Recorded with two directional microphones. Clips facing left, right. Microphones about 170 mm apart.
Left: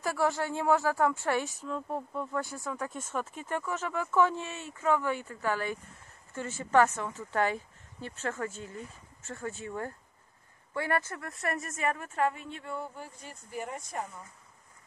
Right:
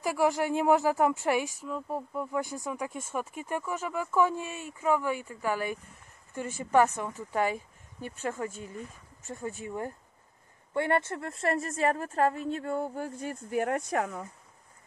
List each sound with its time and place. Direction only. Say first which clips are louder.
0.0 s a woman's voice: right 3 dB; 15° right (ahead or behind); by 14.2 s 85° right